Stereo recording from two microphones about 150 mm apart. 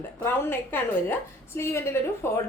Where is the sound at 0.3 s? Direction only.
15° left (ahead or behind).